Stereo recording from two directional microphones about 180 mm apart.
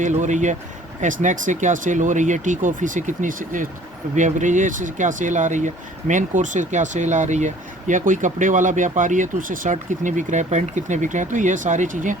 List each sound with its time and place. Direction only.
0.0 s speech: 40° right (ahead or behind)